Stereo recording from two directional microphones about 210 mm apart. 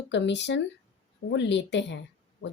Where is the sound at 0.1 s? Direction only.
55° left (ahead or behind).